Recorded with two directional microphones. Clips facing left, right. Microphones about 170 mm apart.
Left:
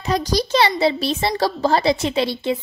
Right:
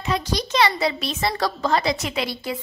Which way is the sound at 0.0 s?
35° left (ahead or behind).